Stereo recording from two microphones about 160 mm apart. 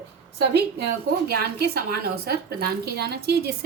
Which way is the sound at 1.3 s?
80° right.